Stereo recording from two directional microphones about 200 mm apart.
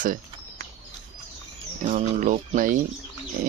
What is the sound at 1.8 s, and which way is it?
Speech, 40° right (ahead or behind).